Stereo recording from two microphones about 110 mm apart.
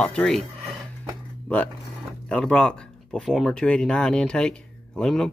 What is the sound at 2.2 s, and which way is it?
Speech, 10° left (ahead or behind).